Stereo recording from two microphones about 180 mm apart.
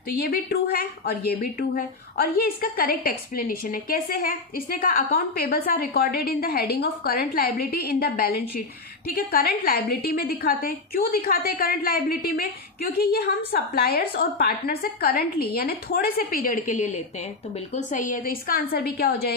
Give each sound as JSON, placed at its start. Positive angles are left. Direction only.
{"t": 0.2, "sound": "a woman's voice", "side_deg": 55}